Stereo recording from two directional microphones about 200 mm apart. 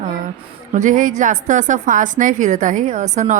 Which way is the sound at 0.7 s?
40° right (ahead or behind).